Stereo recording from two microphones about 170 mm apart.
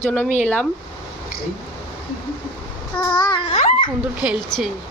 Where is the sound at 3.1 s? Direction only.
25° left (ahead or behind).